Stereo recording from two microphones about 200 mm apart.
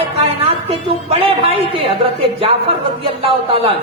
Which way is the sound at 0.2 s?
30° right (ahead or behind).